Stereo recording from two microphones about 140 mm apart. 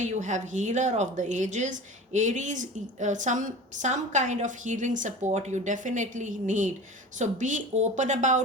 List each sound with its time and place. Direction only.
0.0 s a woman's voice: 60° right (ahead or behind)